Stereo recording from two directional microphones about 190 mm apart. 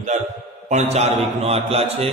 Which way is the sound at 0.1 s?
40° right (ahead or behind).